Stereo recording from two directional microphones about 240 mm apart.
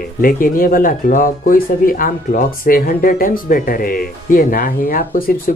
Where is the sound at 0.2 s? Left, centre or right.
Left.